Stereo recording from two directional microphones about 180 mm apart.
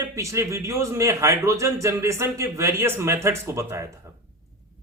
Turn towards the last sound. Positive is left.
turn(degrees=-15)  # may be behind; listen again after turning